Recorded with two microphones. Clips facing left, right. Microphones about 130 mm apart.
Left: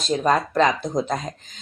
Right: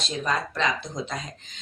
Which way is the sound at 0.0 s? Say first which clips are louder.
Left 8 dB; 45° left (ahead or behind).